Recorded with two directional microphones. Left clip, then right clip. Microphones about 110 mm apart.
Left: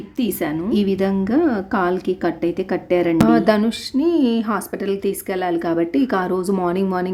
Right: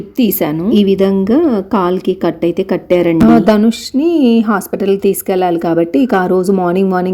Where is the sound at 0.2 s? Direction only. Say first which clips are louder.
Right 8 dB; 55° right (ahead or behind).